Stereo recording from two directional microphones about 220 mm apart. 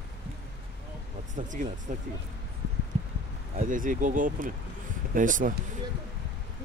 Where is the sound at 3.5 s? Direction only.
35° right (ahead or behind).